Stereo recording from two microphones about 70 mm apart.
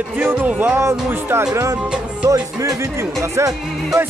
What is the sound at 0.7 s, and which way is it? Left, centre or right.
Speech, right.